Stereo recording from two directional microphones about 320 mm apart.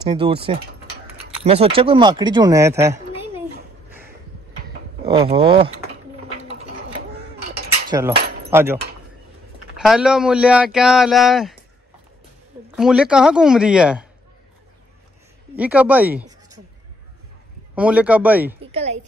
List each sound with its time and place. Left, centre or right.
0.1 s speech: centre
5.0 s speech: centre
7.9 s speech: centre
9.8 s speech: centre
12.7 s speech: centre
15.5 s speech: centre
17.7 s speech: centre
18.6 s a woman's voice: centre